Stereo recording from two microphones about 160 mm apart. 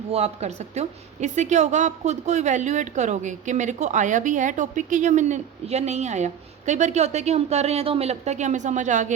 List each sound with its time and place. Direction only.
0.1 s a woman's voice: 40° right (ahead or behind)